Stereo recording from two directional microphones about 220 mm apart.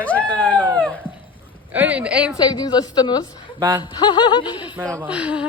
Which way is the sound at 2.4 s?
20° left (ahead or behind).